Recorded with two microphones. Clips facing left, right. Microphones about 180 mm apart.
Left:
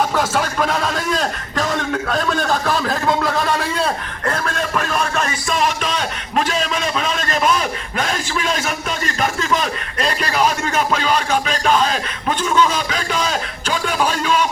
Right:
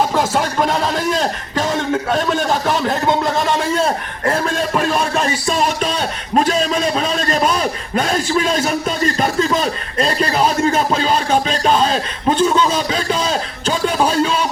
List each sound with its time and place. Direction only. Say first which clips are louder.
0.1 s a man's voice: right 2 dB; 25° right (ahead or behind)